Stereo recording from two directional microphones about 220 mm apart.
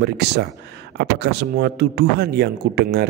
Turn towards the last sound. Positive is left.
turn(degrees=-45)  # may be behind; listen again after turning